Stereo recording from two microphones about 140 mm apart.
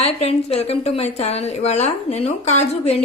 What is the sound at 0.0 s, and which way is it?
A woman's voice, 50° left (ahead or behind).